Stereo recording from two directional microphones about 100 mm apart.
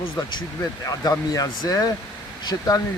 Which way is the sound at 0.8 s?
35° left (ahead or behind).